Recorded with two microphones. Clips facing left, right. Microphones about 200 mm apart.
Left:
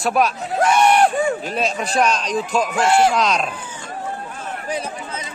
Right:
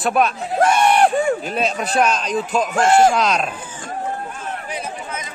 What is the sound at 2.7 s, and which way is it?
Speech, 50° right (ahead or behind).